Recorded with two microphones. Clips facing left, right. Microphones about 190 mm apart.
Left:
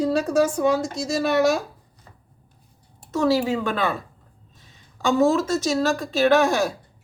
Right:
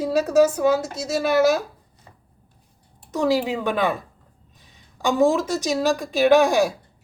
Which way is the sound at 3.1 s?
15° right (ahead or behind).